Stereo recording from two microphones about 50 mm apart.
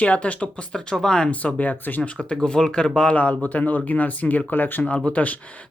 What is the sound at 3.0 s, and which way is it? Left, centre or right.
Speech, left.